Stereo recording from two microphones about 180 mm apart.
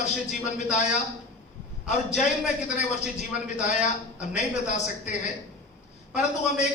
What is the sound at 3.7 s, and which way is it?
Speech, 40° left (ahead or behind).